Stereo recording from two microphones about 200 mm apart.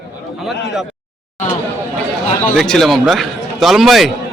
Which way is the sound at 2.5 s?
Centre (ahead or behind).